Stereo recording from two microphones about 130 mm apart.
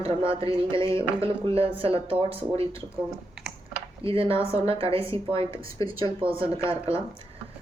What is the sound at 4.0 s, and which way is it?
Speech, 45° right (ahead or behind).